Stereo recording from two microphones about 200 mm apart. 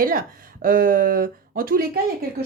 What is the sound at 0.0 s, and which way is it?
Speech, 45° right (ahead or behind).